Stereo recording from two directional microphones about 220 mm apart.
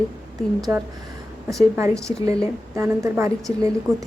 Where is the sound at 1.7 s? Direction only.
10° right (ahead or behind).